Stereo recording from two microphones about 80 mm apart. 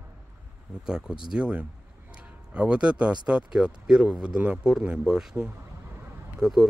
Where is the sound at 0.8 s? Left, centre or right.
Centre.